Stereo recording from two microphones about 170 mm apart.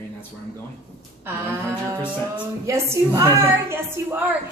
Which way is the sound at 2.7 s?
20° right (ahead or behind).